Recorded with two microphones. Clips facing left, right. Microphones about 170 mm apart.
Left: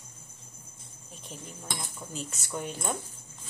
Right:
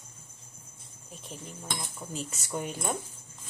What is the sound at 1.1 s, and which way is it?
Cutlery, centre (ahead or behind).